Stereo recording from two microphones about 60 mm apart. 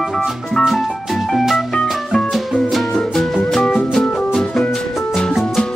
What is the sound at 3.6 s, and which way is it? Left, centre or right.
Music, left.